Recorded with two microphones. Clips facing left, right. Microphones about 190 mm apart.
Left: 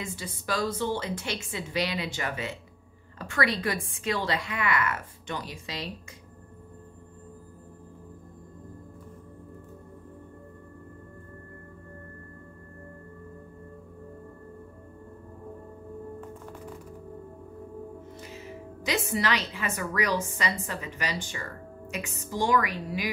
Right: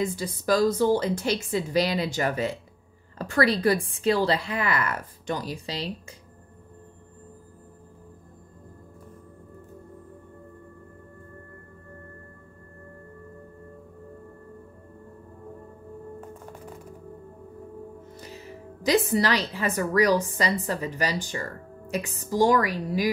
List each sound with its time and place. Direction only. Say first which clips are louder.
0.0 s a woman's voice: right 9 dB; 40° right (ahead or behind)
18.2 s a woman's voice: even; 35° right (ahead or behind)